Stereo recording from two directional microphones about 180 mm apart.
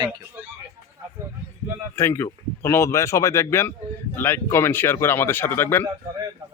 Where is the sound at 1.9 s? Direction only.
15° left (ahead or behind).